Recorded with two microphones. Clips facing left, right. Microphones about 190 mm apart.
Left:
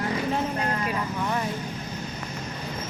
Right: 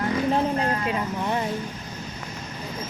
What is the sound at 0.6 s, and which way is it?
Speech, 25° right (ahead or behind).